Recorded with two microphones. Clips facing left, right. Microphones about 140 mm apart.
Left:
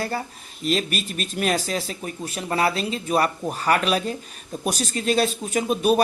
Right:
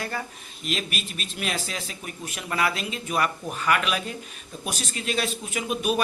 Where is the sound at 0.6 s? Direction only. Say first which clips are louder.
Left 7 dB; 35° left (ahead or behind).